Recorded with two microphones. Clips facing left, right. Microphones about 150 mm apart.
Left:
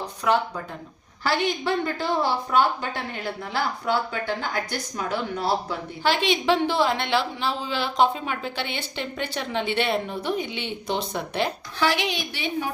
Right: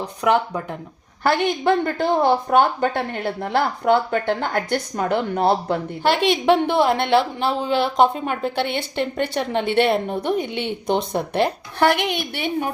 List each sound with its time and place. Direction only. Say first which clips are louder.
0.2 s a woman's voice: right 4 dB; 65° right (ahead or behind)